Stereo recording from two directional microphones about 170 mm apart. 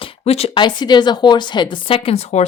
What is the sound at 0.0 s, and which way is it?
Speech, 35° left (ahead or behind).